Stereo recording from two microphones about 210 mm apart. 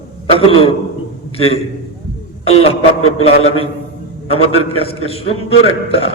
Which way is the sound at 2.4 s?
30° left (ahead or behind).